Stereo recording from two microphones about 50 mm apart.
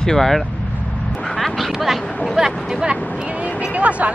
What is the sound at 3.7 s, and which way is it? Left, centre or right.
Speech, right.